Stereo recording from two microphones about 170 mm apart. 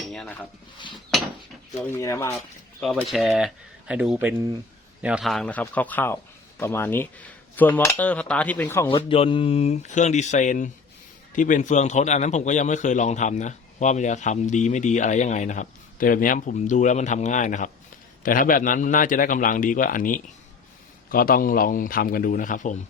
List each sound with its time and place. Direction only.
0.0 s dishes: 5° left (ahead or behind)
1.8 s cutlery: 15° left (ahead or behind)
2.8 s speech: centre (ahead or behind)
5.0 s cutlery: 5° right (ahead or behind); by 8.9 s 10° left (ahead or behind)
8.9 s a man's voice: 30° left (ahead or behind); by 22.8 s 45° left (ahead or behind)